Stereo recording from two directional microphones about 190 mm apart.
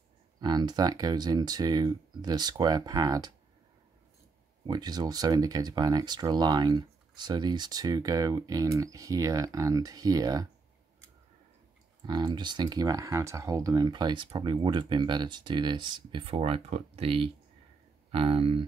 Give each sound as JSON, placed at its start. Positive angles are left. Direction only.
{"t": 0.4, "sound": "speech", "side_deg": -20}
{"t": 4.6, "sound": "speech", "side_deg": -20}
{"t": 12.1, "sound": "speech", "side_deg": -25}